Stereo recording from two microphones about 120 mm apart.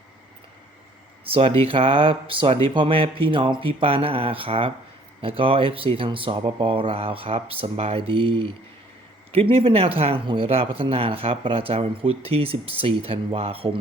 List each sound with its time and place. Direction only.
1.2 s speech: 50° right (ahead or behind)